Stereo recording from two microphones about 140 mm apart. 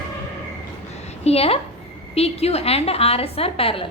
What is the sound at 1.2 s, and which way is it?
A woman's voice, 45° left (ahead or behind).